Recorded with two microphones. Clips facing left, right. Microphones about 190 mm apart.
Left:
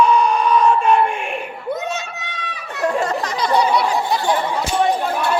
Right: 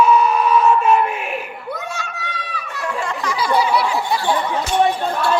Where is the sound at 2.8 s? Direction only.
35° left (ahead or behind).